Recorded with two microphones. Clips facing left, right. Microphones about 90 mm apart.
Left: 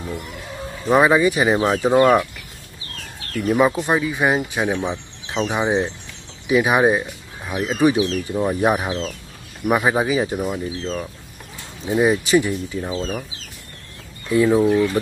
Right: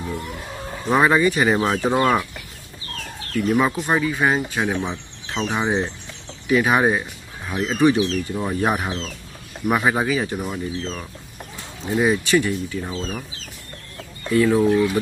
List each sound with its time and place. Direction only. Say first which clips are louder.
0.8 s speech: left 2 dB; 10° left (ahead or behind)
3.4 s speech: left 3 dB; 10° left (ahead or behind)
11.9 s speech: left 2 dB; 15° left (ahead or behind)
12.8 s speech: left 3 dB; 5° left (ahead or behind)
14.3 s speech: left 1 dB; 20° left (ahead or behind)
14.6 s speech: left 1 dB; centre (ahead or behind)